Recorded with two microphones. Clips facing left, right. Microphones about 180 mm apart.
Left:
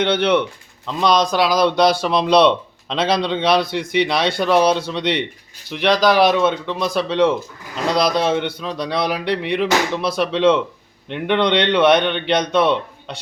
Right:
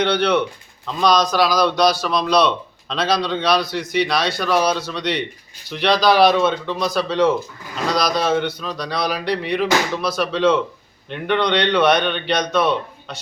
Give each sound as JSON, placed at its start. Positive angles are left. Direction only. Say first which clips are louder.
{"t": 0.0, "sound": "speech", "louder": "left 1 dB", "side_deg": 20}